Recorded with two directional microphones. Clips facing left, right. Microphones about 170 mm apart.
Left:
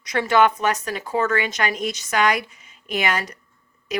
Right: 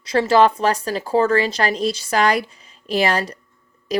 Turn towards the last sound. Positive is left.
turn(degrees=-35)  # may be behind; listen again after turning